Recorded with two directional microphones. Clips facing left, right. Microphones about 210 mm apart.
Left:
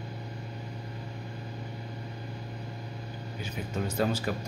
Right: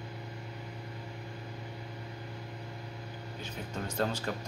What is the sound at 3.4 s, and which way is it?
Speech, 5° left (ahead or behind).